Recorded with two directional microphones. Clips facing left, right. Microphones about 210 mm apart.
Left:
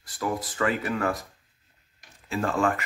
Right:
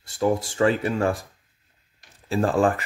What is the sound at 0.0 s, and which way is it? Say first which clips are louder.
Speech: right 7 dB; 25° right (ahead or behind).